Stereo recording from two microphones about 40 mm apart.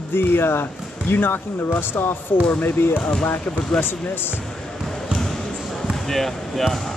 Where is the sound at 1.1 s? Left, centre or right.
Left.